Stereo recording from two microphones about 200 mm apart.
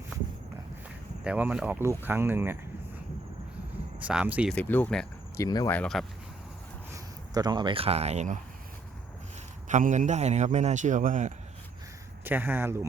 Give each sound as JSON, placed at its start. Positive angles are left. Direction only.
{"t": 1.2, "sound": "speech", "side_deg": -5}
{"t": 4.0, "sound": "speech", "side_deg": -5}
{"t": 4.5, "sound": "speech", "side_deg": 10}
{"t": 5.4, "sound": "speech", "side_deg": 20}
{"t": 5.7, "sound": "speech", "side_deg": 5}
{"t": 6.9, "sound": "speech", "side_deg": -20}
{"t": 9.6, "sound": "a man's voice", "side_deg": -40}
{"t": 12.2, "sound": "speech", "side_deg": -10}